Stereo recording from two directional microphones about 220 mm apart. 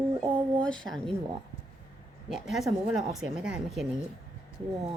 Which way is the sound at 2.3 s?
Centre (ahead or behind).